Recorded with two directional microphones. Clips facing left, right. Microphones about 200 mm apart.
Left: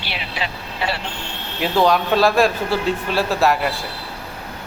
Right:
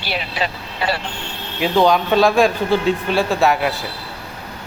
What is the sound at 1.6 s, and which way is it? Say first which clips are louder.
A man's voice: right 2 dB; centre (ahead or behind).